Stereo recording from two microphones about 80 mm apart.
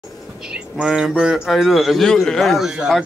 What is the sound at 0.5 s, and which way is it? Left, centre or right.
A man's voice, centre.